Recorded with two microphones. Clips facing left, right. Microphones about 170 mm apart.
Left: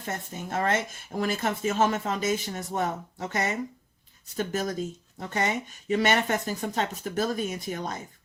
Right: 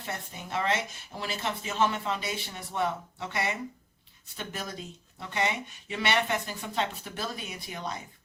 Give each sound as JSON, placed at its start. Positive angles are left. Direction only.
{"t": 0.0, "sound": "speech", "side_deg": 45}